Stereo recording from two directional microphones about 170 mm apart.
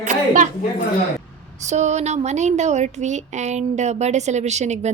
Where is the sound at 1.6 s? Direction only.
45° right (ahead or behind).